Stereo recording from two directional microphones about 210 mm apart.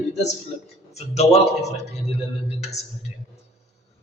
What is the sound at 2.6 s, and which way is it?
Speech, 30° left (ahead or behind).